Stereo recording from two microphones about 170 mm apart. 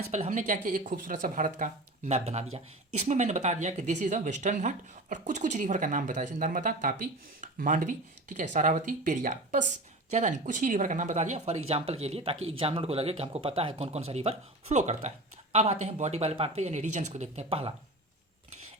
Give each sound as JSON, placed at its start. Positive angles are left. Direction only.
{"t": 0.1, "sound": "speech", "side_deg": -45}